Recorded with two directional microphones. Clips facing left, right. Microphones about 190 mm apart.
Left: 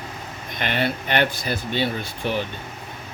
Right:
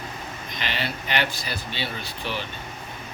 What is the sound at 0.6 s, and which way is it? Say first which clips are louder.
Speech: left 7 dB; 55° left (ahead or behind).